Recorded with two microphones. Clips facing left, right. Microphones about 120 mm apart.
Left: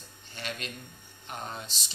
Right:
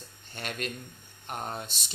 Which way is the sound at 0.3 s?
50° right (ahead or behind).